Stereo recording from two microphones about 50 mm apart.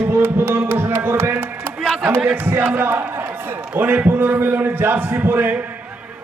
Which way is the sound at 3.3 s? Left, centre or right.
Right.